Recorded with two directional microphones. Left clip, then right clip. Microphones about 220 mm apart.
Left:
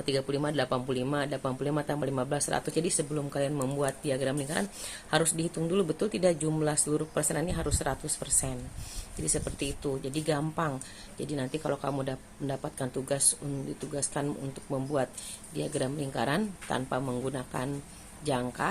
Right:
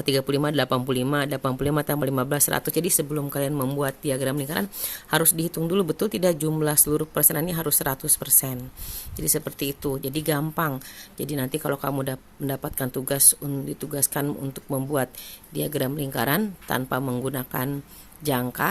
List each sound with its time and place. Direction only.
0.0 s speech: 50° right (ahead or behind)